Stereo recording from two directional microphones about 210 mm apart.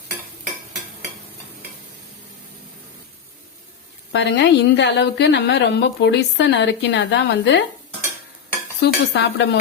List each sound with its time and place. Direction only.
4.1 s a woman's voice: 55° left (ahead or behind)
8.8 s speech: 55° left (ahead or behind)